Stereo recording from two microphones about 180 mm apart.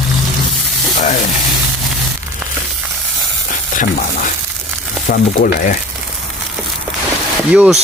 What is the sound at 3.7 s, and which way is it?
Frying, 45° left (ahead or behind).